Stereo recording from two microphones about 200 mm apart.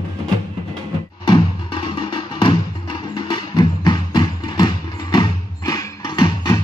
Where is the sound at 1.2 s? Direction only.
25° left (ahead or behind).